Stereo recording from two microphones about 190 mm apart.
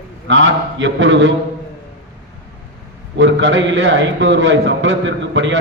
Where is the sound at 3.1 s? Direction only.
75° right (ahead or behind).